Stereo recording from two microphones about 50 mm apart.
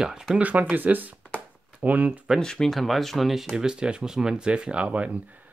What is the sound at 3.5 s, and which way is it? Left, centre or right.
Speech, centre.